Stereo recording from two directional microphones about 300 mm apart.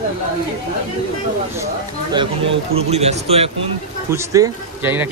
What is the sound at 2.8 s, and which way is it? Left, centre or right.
Speech, right.